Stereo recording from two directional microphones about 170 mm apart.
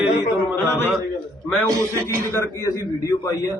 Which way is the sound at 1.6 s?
20° right (ahead or behind).